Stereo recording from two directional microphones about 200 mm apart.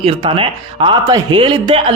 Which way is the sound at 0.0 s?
25° right (ahead or behind).